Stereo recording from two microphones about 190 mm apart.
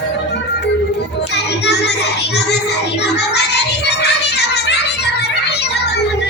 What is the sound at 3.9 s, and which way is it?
Children playing, 60° left (ahead or behind).